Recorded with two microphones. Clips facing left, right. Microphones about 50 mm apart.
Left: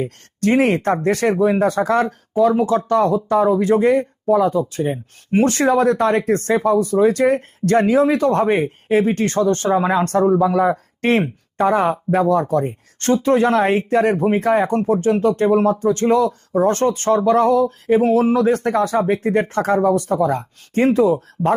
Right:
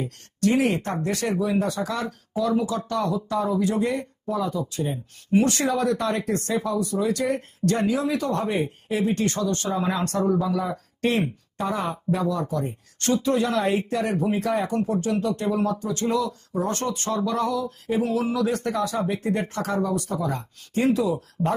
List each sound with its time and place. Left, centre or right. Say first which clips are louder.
0.0 s speech: left 4 dB; left